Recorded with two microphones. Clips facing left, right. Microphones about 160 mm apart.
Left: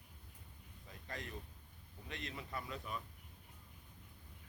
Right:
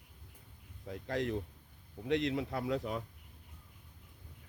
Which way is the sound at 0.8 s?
70° right (ahead or behind).